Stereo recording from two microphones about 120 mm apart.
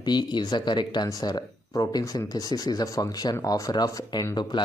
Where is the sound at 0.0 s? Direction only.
40° left (ahead or behind).